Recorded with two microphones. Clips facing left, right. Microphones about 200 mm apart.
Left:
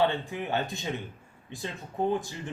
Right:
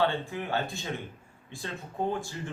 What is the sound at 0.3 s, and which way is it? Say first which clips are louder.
Speech: left 1 dB; 20° left (ahead or behind).